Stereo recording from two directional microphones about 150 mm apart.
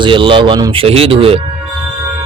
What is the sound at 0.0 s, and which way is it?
Speech, 35° right (ahead or behind).